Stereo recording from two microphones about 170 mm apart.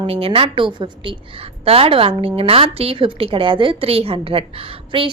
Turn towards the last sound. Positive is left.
turn(degrees=-35)  # may be behind; listen again after turning